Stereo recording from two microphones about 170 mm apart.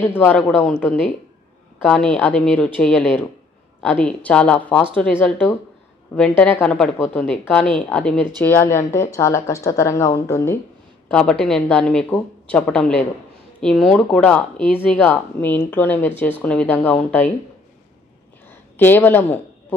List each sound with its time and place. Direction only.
0.0 s speech: 10° left (ahead or behind)
18.8 s speech: 10° left (ahead or behind)